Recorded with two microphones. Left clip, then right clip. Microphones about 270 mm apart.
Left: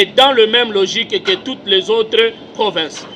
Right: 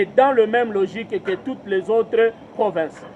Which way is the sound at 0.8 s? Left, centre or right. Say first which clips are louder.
Left 7 dB; right.